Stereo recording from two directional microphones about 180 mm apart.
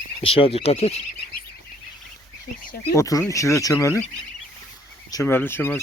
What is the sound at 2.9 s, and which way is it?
Speech, 15° left (ahead or behind).